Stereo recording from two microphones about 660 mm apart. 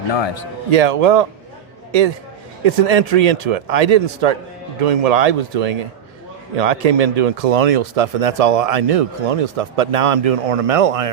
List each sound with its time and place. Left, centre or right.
0.7 s a man's voice: right